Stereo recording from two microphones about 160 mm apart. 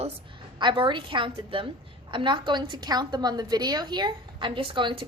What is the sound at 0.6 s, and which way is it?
A woman's voice, 30° right (ahead or behind).